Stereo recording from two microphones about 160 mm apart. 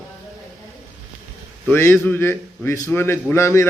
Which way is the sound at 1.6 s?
15° left (ahead or behind).